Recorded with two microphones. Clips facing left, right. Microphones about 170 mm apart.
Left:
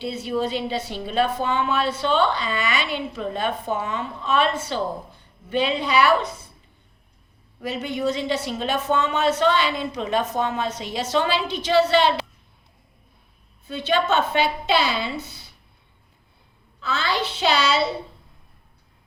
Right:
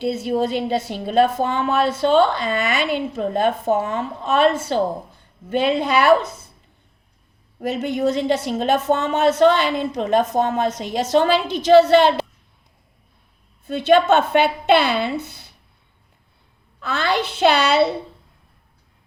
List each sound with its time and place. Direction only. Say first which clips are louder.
0.0 s a woman's voice: right 5 dB; 45° right (ahead or behind)
7.6 s a woman's voice: right 5 dB; 45° right (ahead or behind)
13.7 s a woman's voice: right 7 dB; 50° right (ahead or behind)
16.8 s a woman's voice: right 4 dB; 55° right (ahead or behind)